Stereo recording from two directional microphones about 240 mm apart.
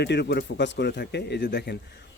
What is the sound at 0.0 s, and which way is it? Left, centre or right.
A man's voice, left.